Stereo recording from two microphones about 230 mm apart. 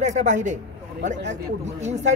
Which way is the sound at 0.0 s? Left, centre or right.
Right.